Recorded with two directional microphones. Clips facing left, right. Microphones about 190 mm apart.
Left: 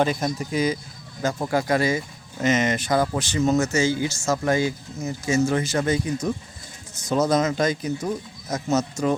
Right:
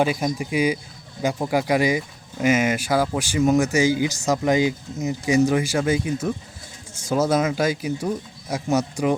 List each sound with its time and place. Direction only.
0.0 s speech: 10° right (ahead or behind)